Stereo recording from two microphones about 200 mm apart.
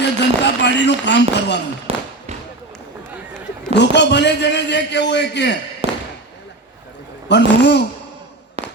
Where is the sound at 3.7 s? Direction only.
60° left (ahead or behind).